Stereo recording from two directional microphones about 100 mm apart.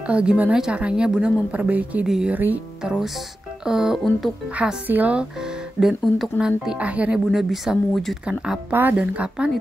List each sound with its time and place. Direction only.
0.0 s a woman's voice: 10° right (ahead or behind)
2.3 s a woman's voice: 15° right (ahead or behind)
4.6 s a woman's voice: 15° right (ahead or behind)
5.8 s a woman's voice: 5° right (ahead or behind)
7.2 s speech: centre (ahead or behind)
8.3 s a woman's voice: 10° right (ahead or behind)